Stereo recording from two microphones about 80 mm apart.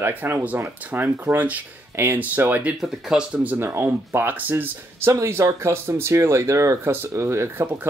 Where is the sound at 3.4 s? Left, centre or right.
Right.